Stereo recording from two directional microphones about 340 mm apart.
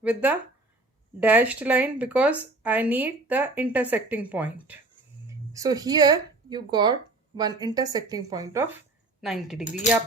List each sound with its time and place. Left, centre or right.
0.0 s a woman's voice: centre
9.6 s speech: left